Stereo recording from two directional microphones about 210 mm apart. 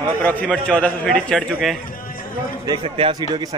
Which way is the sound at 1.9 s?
40° left (ahead or behind).